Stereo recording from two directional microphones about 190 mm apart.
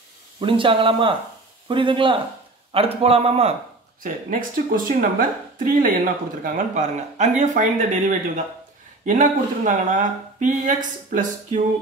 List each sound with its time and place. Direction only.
0.4 s speech: 25° right (ahead or behind)
4.0 s speech: 45° right (ahead or behind)
9.0 s speech: 40° right (ahead or behind)